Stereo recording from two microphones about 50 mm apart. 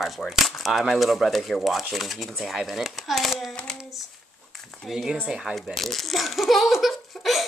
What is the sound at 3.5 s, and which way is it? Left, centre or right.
Speech, centre.